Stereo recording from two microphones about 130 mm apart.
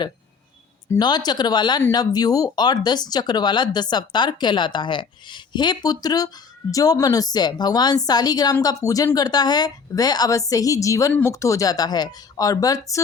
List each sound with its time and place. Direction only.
0.9 s a woman's voice: 30° left (ahead or behind)